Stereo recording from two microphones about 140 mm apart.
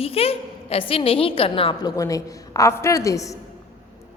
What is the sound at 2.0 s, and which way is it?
A woman's voice, 25° left (ahead or behind).